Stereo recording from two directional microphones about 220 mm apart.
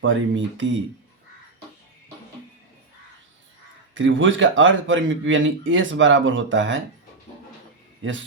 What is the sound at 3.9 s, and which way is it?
Speech, 60° right (ahead or behind).